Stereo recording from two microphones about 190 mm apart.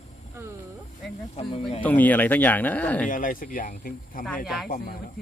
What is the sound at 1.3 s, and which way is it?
Speech, 30° left (ahead or behind).